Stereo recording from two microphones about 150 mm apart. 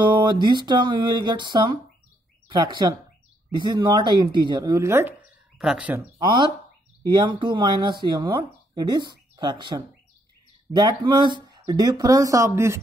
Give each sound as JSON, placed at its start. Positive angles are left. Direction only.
{"t": 0.2, "sound": "speech", "side_deg": -30}
{"t": 5.6, "sound": "speech", "side_deg": -5}
{"t": 6.1, "sound": "speech", "side_deg": -30}